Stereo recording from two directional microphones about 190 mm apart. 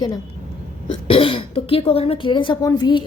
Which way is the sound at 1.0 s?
30° left (ahead or behind).